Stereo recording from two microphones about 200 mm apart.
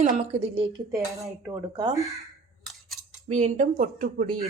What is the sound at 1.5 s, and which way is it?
Speech, 20° right (ahead or behind).